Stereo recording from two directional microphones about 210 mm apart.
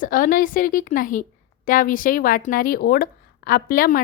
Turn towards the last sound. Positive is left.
turn(degrees=40)  # may be behind; listen again after turning